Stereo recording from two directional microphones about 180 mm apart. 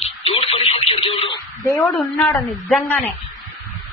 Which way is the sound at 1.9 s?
10° left (ahead or behind).